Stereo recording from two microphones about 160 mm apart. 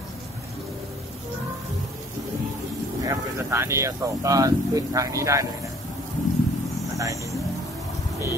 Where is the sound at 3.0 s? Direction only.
15° right (ahead or behind).